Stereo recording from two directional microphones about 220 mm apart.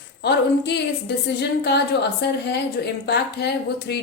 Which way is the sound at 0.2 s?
50° left (ahead or behind).